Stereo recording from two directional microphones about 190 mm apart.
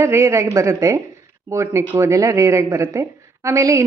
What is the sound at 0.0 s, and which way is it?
A woman's voice, 15° right (ahead or behind).